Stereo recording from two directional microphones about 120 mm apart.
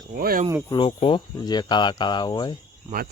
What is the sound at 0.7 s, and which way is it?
Speech, 45° left (ahead or behind).